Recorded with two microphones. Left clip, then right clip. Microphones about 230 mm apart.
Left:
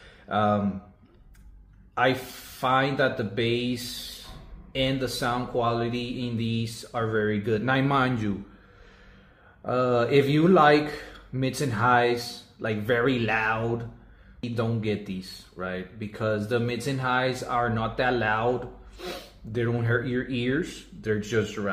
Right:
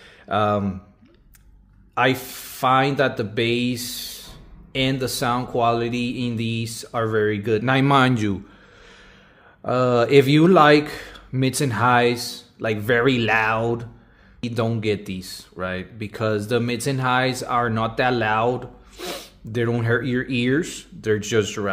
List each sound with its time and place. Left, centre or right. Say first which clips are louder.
0.3 s speech: right 4 dB; right
2.6 s speech: right 5 dB; right
9.6 s speech: right 5 dB; right